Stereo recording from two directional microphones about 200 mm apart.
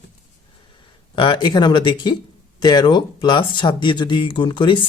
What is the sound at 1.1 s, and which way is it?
Speech, 25° left (ahead or behind).